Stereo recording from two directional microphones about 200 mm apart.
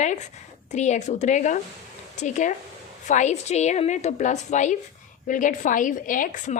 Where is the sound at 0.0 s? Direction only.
35° left (ahead or behind).